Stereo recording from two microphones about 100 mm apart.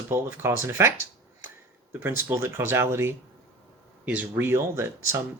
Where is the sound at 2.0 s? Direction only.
25° right (ahead or behind).